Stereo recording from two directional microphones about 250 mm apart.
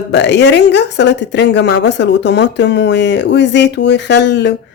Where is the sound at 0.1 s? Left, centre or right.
Left.